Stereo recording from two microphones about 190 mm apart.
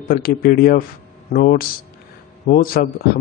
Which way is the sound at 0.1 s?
55° left (ahead or behind).